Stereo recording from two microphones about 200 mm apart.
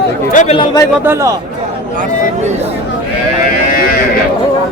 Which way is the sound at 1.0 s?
15° right (ahead or behind).